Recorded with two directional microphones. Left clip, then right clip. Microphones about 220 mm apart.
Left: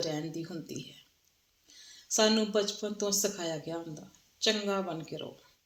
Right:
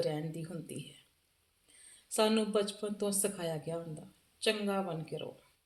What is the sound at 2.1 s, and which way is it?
Speech, 25° left (ahead or behind).